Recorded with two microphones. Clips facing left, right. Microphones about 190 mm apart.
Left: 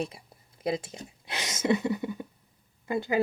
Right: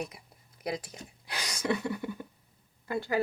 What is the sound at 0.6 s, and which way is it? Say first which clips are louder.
Speech: left 5 dB; 25° left (ahead or behind).